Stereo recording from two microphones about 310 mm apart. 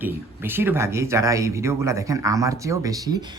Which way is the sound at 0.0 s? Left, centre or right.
Centre.